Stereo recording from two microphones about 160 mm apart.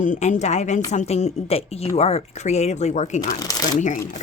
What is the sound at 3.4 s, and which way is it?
Speech, 25° left (ahead or behind).